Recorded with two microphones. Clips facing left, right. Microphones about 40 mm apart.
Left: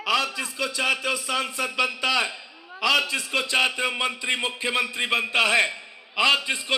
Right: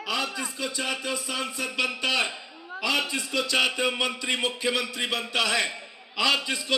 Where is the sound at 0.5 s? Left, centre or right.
Left.